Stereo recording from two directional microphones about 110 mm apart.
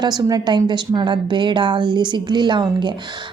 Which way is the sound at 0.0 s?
40° right (ahead or behind).